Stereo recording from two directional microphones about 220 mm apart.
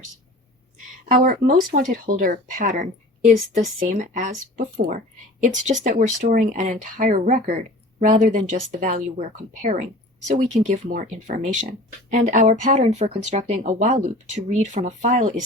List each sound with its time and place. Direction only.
1.0 s speech: 35° right (ahead or behind)